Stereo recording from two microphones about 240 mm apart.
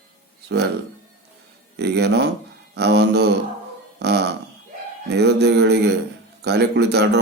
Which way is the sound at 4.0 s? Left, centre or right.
Right.